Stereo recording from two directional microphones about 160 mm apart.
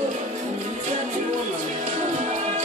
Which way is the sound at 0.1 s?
50° right (ahead or behind).